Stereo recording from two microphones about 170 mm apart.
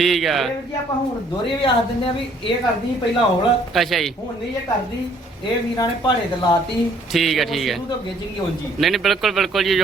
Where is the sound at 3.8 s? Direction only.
Centre (ahead or behind).